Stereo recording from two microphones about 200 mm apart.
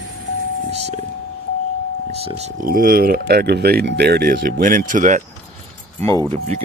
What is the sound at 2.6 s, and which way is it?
Speech, 45° right (ahead or behind).